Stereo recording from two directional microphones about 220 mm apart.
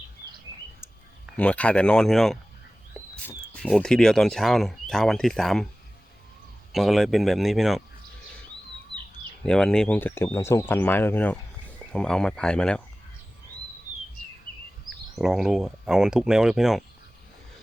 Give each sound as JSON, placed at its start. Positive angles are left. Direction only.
{"t": 1.4, "sound": "speech", "side_deg": 5}
{"t": 6.7, "sound": "speech", "side_deg": 0}
{"t": 9.4, "sound": "speech", "side_deg": 5}
{"t": 14.5, "sound": "a sound", "side_deg": 40}
{"t": 15.1, "sound": "speech", "side_deg": 0}